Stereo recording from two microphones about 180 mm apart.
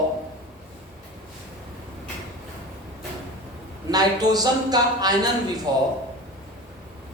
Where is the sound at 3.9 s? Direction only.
20° right (ahead or behind).